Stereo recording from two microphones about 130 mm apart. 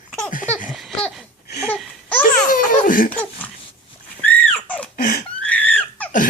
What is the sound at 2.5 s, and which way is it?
Laughter, 90° left.